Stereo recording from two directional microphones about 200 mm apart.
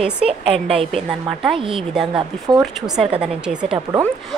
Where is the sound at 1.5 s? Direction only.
25° right (ahead or behind).